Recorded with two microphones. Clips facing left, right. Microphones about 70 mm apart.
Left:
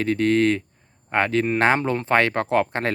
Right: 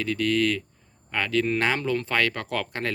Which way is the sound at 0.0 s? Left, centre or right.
Left.